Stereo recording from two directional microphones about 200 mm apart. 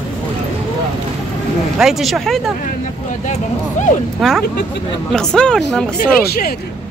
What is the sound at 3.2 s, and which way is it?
Speech, 35° left (ahead or behind).